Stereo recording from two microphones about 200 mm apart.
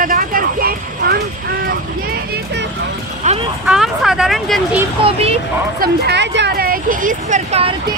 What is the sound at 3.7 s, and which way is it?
Speech, centre (ahead or behind).